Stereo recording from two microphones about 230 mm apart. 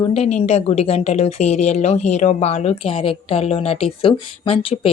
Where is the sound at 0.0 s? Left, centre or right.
Left.